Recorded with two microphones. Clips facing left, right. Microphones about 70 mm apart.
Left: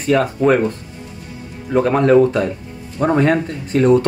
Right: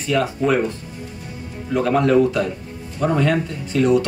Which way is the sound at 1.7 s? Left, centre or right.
Left.